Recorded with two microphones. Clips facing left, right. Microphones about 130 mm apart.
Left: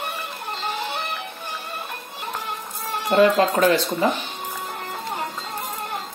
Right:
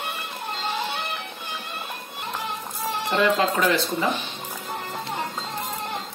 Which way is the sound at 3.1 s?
45° left (ahead or behind).